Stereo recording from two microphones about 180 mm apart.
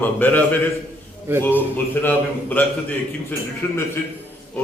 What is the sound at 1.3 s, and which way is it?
Speech, 15° right (ahead or behind).